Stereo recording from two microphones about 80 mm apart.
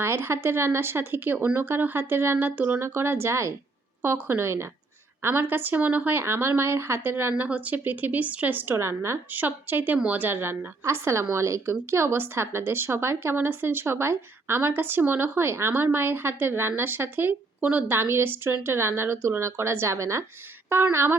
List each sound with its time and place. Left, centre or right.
0.0 s a woman's voice: right
8.7 s a woman's voice: right